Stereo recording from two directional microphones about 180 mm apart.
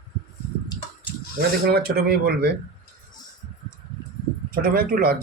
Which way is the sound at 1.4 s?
60° right (ahead or behind).